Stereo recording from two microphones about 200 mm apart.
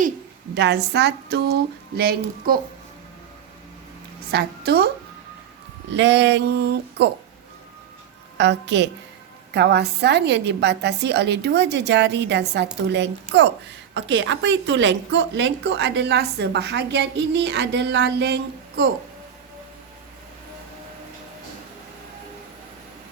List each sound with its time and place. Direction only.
0.5 s a woman's voice: 60° right (ahead or behind)
4.3 s a woman's voice: 50° right (ahead or behind)
5.9 s a woman's voice: 60° right (ahead or behind)
8.4 s a woman's voice: 60° right (ahead or behind)